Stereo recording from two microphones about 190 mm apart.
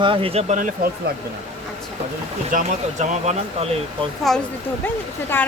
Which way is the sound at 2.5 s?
35° right (ahead or behind).